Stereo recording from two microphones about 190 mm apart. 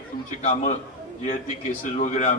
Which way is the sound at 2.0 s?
40° left (ahead or behind).